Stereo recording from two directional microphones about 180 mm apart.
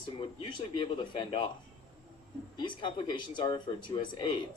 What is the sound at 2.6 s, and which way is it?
Speech, 25° left (ahead or behind).